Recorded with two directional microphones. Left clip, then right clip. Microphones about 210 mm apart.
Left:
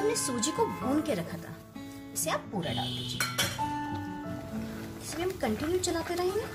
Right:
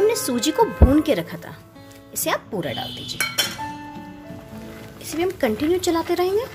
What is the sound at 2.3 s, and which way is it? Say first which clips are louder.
Speech: right 9 dB; 40° right (ahead or behind).